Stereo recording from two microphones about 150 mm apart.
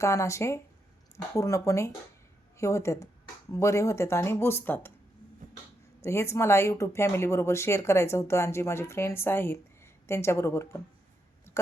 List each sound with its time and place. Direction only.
0.0 s speech: 20° left (ahead or behind)
6.0 s speech: 20° left (ahead or behind)